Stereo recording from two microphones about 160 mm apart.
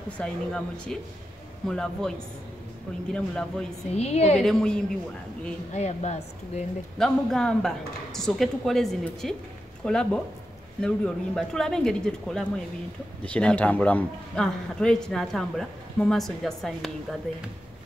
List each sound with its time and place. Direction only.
0.2 s speech: 5° left (ahead or behind)
3.9 s speech: 40° left (ahead or behind)
4.4 s speech: 5° left (ahead or behind)
5.7 s speech: 45° left (ahead or behind)
7.0 s speech: 5° left (ahead or behind)